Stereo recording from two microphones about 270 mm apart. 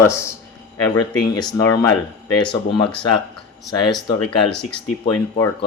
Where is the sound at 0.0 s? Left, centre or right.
Centre.